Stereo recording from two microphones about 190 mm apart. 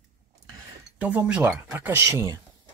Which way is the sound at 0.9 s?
5° right (ahead or behind).